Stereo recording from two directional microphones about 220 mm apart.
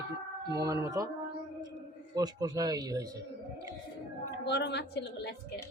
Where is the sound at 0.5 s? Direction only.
15° right (ahead or behind).